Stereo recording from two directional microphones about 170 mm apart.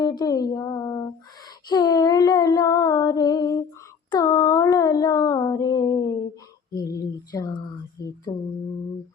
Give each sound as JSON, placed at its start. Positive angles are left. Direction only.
{"t": 0.0, "sound": "female singing", "side_deg": 20}
{"t": 4.1, "sound": "a sound", "side_deg": 20}
{"t": 6.7, "sound": "female singing", "side_deg": 20}